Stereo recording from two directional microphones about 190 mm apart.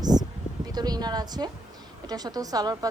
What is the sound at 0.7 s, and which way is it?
A woman's voice, 20° right (ahead or behind).